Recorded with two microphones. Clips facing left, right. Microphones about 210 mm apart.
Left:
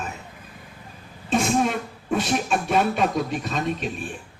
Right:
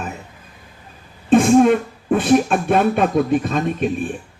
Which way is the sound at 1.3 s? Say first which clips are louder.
Right 10 dB; 55° right (ahead or behind).